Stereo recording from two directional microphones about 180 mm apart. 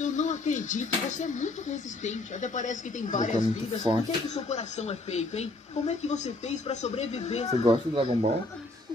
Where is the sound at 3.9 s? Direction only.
15° right (ahead or behind).